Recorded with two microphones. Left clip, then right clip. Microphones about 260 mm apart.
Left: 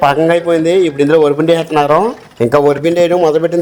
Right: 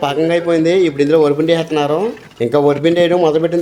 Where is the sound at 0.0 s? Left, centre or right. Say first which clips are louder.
Left 5 dB; centre.